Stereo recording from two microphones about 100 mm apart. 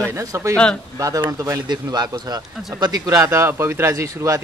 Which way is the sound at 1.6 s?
45° right (ahead or behind).